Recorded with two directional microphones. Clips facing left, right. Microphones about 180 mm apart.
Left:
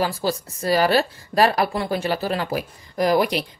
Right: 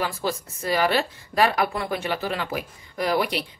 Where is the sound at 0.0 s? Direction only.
35° left (ahead or behind).